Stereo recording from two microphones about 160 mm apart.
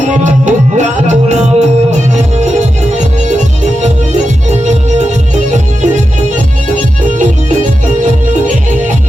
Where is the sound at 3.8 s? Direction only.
45° right (ahead or behind).